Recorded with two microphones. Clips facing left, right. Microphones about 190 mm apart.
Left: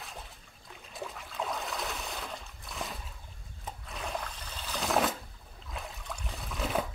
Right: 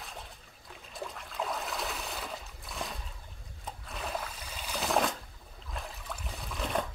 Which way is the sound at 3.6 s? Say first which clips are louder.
Even; centre (ahead or behind).